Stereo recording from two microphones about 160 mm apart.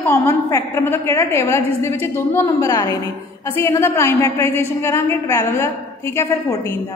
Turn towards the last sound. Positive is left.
turn(degrees=20)  # may be behind; listen again after turning